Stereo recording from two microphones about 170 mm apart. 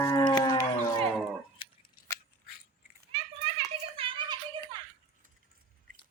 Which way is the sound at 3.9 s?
30° right (ahead or behind).